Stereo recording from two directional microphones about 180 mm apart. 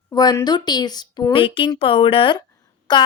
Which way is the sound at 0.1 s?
20° left (ahead or behind).